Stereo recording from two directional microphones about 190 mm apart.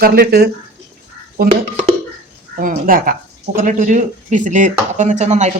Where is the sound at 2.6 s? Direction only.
45° right (ahead or behind).